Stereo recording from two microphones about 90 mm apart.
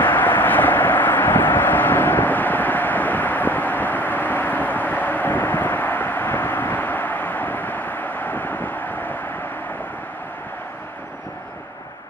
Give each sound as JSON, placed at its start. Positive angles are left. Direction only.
{"t": 0.0, "sound": "vehicle", "side_deg": 20}